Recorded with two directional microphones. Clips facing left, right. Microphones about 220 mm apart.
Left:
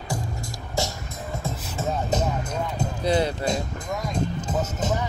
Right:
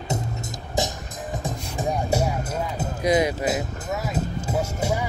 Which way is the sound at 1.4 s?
15° right (ahead or behind).